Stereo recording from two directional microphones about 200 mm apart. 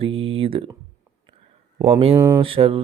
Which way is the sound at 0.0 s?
30° right (ahead or behind).